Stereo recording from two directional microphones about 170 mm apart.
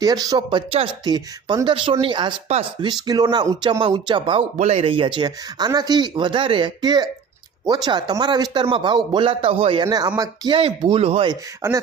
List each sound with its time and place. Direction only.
0.0 s speech: 20° right (ahead or behind)
9.8 s speech: 20° right (ahead or behind)
11.6 s speech: 15° right (ahead or behind)